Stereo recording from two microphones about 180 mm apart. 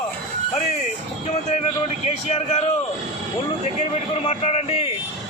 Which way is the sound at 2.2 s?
35° left (ahead or behind).